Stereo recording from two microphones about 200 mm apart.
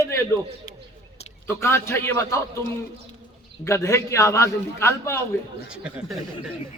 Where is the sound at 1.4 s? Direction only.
10° left (ahead or behind).